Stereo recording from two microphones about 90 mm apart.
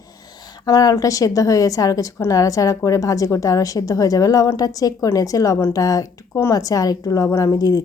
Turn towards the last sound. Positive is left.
turn(degrees=40)  # may be behind; listen again after turning